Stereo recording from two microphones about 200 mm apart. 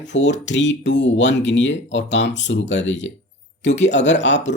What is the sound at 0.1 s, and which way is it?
Speech, 65° left (ahead or behind).